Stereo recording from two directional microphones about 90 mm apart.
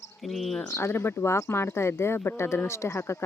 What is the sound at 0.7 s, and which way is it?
Speech, 25° left (ahead or behind).